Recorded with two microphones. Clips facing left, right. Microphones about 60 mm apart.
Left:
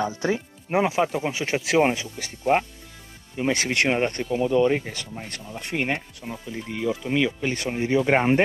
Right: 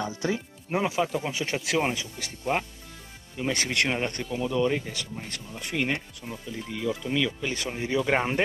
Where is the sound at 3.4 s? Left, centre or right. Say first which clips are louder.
Left 4 dB; left.